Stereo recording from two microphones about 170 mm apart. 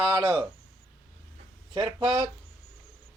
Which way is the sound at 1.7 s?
25° right (ahead or behind).